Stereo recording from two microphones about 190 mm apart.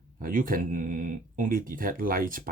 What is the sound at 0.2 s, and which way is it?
Speech, 45° right (ahead or behind).